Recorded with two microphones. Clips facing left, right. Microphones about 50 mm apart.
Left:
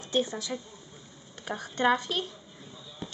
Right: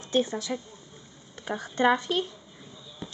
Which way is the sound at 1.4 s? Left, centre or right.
Right.